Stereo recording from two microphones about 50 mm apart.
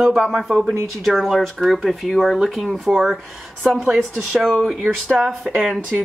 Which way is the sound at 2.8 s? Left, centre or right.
Centre.